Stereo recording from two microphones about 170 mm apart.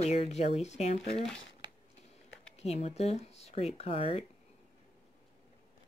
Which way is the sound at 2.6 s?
40° left (ahead or behind).